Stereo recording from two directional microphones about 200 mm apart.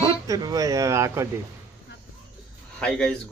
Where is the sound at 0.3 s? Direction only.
20° right (ahead or behind).